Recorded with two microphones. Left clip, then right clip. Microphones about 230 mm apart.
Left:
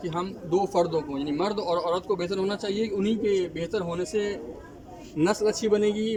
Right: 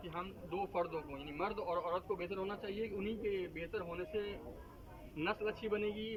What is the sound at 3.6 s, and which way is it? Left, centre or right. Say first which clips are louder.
A man's voice: left 13 dB; centre.